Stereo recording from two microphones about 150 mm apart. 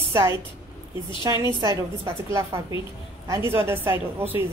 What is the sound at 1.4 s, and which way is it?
A woman's voice, 20° right (ahead or behind).